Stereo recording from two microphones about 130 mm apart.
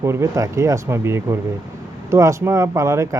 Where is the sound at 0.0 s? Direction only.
20° right (ahead or behind).